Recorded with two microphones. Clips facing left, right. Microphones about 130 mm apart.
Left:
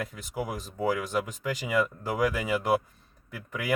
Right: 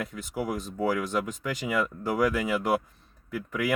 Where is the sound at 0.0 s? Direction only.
Centre (ahead or behind).